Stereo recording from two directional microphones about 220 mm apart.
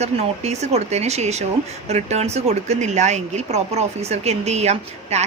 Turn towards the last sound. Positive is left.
turn(degrees=-30)  # may be behind; listen again after turning